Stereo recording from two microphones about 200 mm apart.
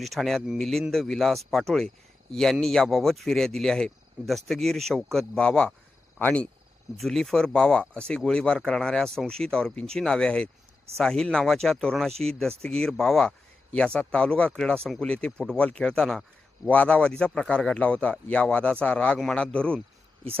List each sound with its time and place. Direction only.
0.0 s a man's voice: centre (ahead or behind)